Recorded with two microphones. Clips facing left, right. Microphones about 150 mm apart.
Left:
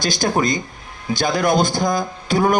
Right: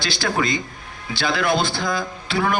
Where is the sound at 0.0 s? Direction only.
45° left (ahead or behind).